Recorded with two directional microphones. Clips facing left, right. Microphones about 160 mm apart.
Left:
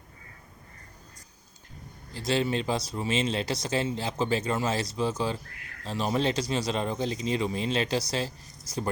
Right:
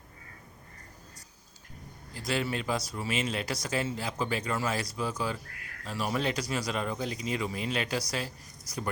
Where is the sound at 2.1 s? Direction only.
25° left (ahead or behind).